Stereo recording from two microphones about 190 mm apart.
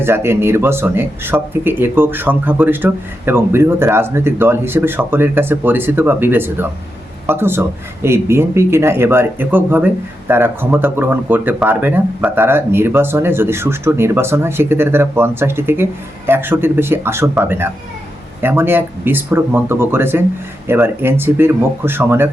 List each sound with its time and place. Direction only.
0.0 s speech: 10° right (ahead or behind)